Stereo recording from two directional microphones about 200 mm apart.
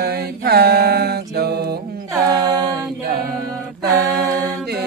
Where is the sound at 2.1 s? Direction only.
20° right (ahead or behind).